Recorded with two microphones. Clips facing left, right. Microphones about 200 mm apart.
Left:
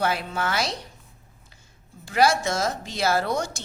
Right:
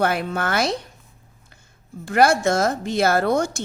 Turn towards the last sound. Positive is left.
turn(degrees=-55)  # may be behind; listen again after turning